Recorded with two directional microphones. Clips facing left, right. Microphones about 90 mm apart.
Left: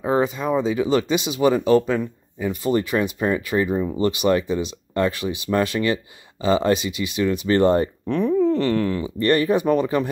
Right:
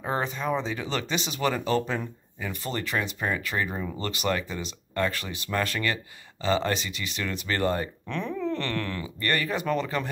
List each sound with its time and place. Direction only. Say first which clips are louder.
0.0 s speech: left 8 dB; 15° left (ahead or behind)